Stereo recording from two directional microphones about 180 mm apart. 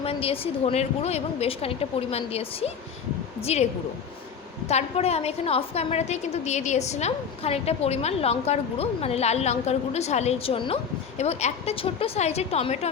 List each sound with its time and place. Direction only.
0.0 s a woman's voice: 30° left (ahead or behind)
4.7 s a woman's voice: 35° left (ahead or behind)